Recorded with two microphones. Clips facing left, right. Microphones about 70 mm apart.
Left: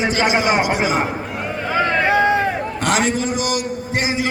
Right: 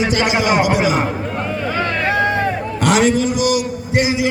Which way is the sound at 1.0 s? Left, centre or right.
Centre.